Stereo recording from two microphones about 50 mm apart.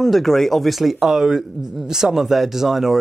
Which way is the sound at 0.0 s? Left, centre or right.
Centre.